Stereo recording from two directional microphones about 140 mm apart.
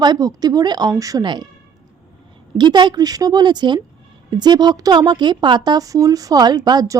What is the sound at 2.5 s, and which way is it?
A woman's voice, 35° right (ahead or behind).